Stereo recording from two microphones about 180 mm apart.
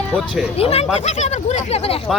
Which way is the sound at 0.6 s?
35° left (ahead or behind).